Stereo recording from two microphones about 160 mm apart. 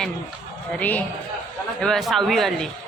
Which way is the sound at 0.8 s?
10° left (ahead or behind).